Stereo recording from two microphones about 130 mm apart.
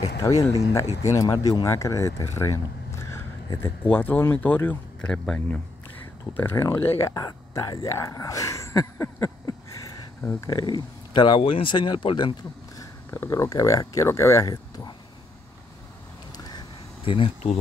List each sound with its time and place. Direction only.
0.2 s speech: 25° left (ahead or behind); by 5.6 s 5° left (ahead or behind)
6.3 s speech: 20° left (ahead or behind); by 12.4 s 40° left (ahead or behind)
12.7 s speech: 20° left (ahead or behind)
16.3 s a sound: 35° left (ahead or behind)